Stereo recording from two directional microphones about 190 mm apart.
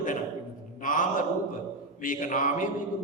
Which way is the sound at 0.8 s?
45° left (ahead or behind).